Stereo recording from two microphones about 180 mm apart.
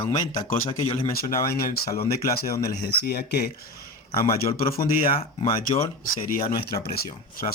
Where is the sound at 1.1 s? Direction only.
55° left (ahead or behind).